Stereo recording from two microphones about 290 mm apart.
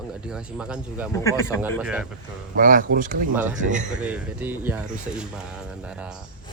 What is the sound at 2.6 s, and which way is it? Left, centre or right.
Speech, right.